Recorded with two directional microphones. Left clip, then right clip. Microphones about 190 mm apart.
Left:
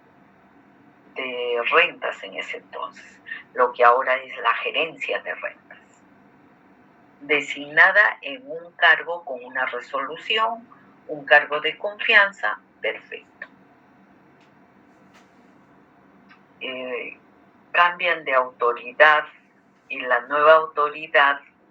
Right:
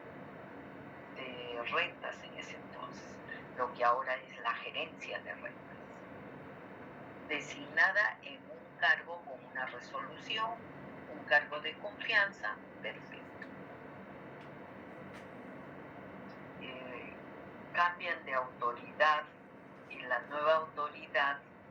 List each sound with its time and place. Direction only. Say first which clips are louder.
1.1 s speech: left 18 dB; 45° left (ahead or behind)
7.3 s speech: left 17 dB; 45° left (ahead or behind)
16.6 s speech: left 17 dB; 45° left (ahead or behind)